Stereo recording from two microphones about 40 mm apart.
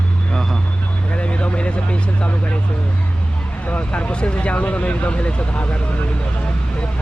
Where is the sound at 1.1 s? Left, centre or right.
Left.